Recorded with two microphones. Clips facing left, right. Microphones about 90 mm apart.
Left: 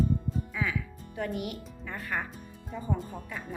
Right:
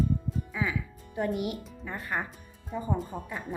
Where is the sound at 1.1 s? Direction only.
15° right (ahead or behind).